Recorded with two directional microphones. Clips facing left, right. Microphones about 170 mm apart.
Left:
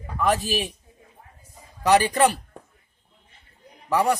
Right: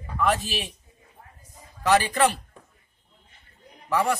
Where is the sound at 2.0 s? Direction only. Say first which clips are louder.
Left 3 dB; 40° left (ahead or behind).